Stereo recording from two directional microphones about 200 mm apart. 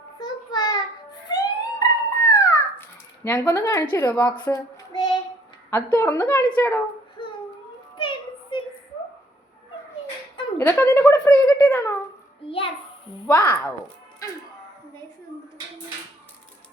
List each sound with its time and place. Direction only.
0.2 s child singing: 20° left (ahead or behind)
1.3 s a sound: 20° left (ahead or behind)
3.2 s a woman's voice: 10° left (ahead or behind)
4.4 s child singing: 20° left (ahead or behind)
5.7 s a woman's voice: 10° left (ahead or behind)
7.9 s a sound: 25° left (ahead or behind)
10.7 s a woman's voice: 10° left (ahead or behind)
11.4 s a sound: 10° left (ahead or behind)
12.5 s a child's voice: 25° left (ahead or behind)
13.2 s a woman's voice: 10° left (ahead or behind)